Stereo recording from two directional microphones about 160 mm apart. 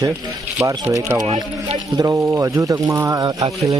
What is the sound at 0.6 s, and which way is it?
Speech, 20° right (ahead or behind).